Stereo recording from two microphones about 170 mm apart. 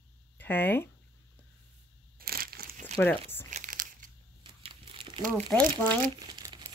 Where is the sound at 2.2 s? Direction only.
65° right (ahead or behind).